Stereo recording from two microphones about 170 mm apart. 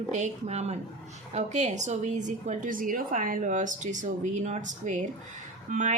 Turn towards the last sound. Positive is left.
turn(degrees=-50)  # may be behind; listen again after turning